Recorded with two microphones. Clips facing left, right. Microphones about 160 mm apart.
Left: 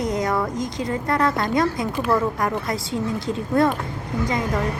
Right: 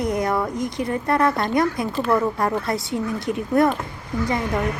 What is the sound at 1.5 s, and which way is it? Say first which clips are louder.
Speech: right 1 dB; 20° left (ahead or behind).